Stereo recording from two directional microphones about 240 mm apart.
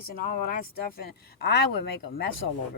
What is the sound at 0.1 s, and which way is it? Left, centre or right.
Speech, left.